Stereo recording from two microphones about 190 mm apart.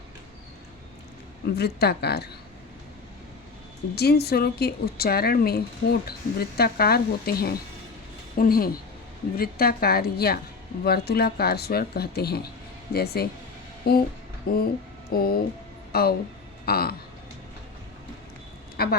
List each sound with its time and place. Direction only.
1.5 s speech: 60° left (ahead or behind)
3.9 s speech: 55° left (ahead or behind)
18.8 s speech: 55° left (ahead or behind)